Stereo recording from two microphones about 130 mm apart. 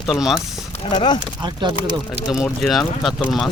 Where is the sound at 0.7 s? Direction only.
45° left (ahead or behind).